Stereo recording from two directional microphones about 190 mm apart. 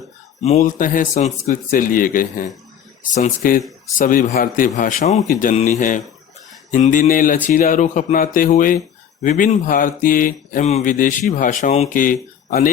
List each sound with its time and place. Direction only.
0.4 s speech: 40° left (ahead or behind)